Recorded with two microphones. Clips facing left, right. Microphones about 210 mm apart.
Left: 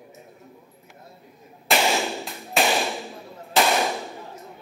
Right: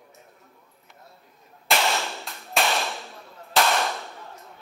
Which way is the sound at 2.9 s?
15° left (ahead or behind).